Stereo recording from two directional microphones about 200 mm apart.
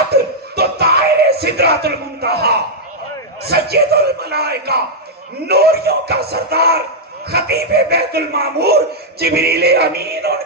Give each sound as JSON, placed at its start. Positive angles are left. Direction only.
{"t": 0.1, "sound": "music", "side_deg": -55}
{"t": 3.4, "sound": "speech", "side_deg": -50}